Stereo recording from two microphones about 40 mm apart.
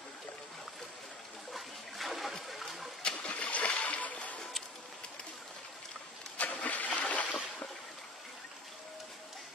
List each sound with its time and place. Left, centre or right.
1.5 s water: centre
3.0 s splash: left
6.3 s vehicle: left
7.1 s a sound: left